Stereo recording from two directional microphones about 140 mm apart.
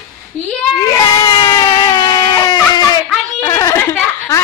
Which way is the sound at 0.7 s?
30° left (ahead or behind).